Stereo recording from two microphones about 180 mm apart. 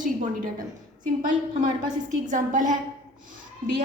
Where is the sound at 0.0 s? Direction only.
50° right (ahead or behind).